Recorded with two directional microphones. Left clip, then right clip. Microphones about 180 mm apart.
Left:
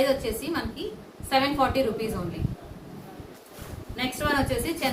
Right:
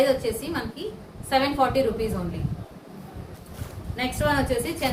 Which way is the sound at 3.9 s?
35° left (ahead or behind).